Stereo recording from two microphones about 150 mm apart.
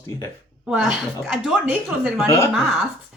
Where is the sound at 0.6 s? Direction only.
5° right (ahead or behind).